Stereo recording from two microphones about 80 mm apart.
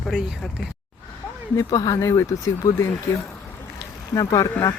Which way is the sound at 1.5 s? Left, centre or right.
Left.